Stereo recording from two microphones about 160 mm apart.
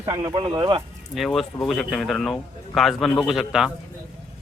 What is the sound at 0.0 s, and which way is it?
Speech, 25° right (ahead or behind).